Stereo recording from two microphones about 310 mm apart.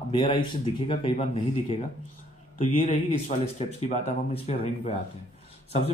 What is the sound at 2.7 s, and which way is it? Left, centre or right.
A man's voice, centre.